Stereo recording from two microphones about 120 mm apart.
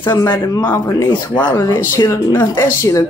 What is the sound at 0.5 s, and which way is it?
Speech, 30° left (ahead or behind).